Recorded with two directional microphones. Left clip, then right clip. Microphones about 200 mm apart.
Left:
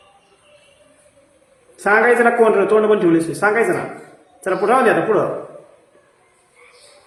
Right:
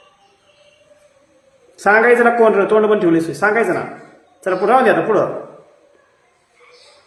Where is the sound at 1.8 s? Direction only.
25° right (ahead or behind).